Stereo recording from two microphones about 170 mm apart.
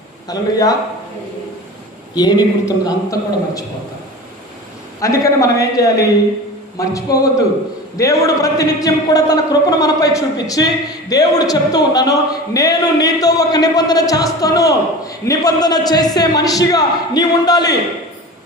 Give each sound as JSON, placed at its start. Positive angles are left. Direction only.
{"t": 0.3, "sound": "a man's voice", "side_deg": 20}
{"t": 2.1, "sound": "a man's voice", "side_deg": 25}
{"t": 4.9, "sound": "a man's voice", "side_deg": 20}